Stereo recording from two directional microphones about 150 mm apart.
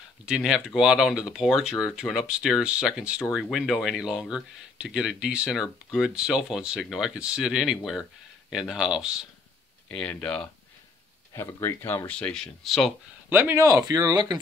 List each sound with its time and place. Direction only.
0.2 s speech: 5° right (ahead or behind)
9.8 s speech: 5° left (ahead or behind)
11.3 s speech: 15° left (ahead or behind); by 12.9 s centre (ahead or behind)
13.3 s speech: 15° right (ahead or behind)